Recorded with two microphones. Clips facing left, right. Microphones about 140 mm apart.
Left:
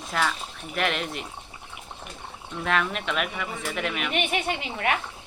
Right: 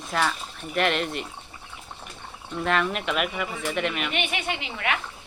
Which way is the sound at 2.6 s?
Centre (ahead or behind).